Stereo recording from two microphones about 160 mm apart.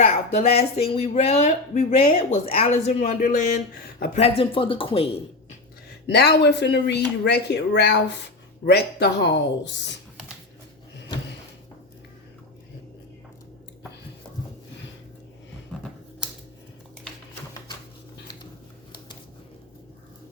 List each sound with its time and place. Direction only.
0.0 s speech: 45° left (ahead or behind)
4.1 s speech: 40° left (ahead or behind)
6.1 s speech: 90° left